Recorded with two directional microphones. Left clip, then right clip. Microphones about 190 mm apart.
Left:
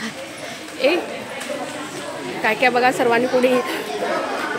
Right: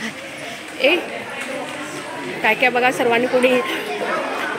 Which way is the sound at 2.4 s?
Centre (ahead or behind).